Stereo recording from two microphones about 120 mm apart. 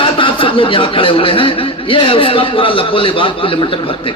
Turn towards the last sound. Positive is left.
turn(degrees=45)  # may be behind; listen again after turning